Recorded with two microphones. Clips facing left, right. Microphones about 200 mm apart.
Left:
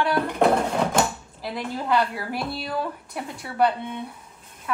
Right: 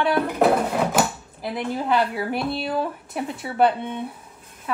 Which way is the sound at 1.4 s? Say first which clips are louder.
Right 3 dB; 20° right (ahead or behind).